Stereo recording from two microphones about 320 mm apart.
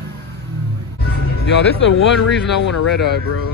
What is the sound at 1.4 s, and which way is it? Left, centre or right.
Speech, left.